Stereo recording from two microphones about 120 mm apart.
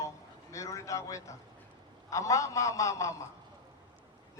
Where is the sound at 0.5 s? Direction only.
25° left (ahead or behind).